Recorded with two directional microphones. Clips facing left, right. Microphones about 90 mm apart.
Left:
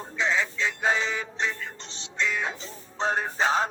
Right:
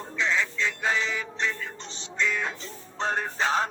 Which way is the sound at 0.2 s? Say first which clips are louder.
Left 1 dB; 20° left (ahead or behind).